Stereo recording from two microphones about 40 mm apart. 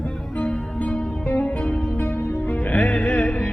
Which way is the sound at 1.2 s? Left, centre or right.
Left.